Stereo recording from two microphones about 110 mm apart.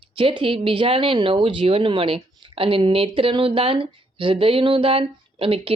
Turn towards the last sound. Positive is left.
turn(degrees=-60)  # may be behind; listen again after turning